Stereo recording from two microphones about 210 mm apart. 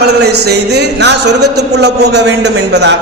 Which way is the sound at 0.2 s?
50° right (ahead or behind).